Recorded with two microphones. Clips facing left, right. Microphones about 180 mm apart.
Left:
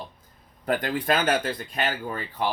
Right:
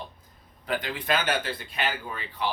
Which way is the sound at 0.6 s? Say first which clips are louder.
Left 5 dB; 45° left (ahead or behind).